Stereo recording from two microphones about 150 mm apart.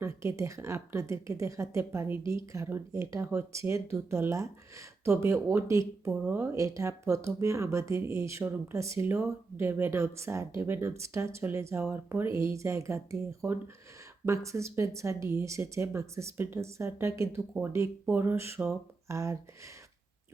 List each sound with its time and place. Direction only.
0.0 s speech: 20° right (ahead or behind)